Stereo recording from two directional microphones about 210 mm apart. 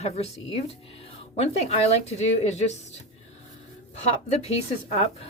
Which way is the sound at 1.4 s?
30° left (ahead or behind).